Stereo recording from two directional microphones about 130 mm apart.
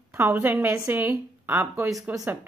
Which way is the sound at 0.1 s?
20° right (ahead or behind).